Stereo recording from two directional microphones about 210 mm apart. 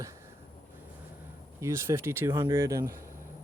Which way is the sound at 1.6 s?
10° right (ahead or behind).